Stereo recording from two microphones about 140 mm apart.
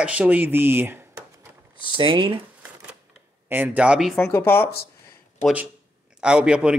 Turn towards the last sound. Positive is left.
turn(degrees=-5)  # may be behind; listen again after turning